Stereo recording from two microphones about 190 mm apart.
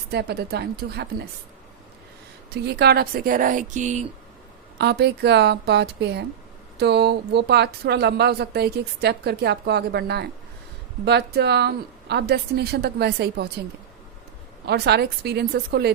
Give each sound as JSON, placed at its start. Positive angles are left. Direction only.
{"t": 0.1, "sound": "speech", "side_deg": -60}
{"t": 2.5, "sound": "speech", "side_deg": -60}
{"t": 4.8, "sound": "speech", "side_deg": -60}
{"t": 14.7, "sound": "speech", "side_deg": -60}